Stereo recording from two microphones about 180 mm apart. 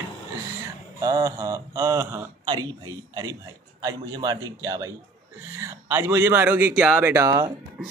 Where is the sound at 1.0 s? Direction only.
20° right (ahead or behind).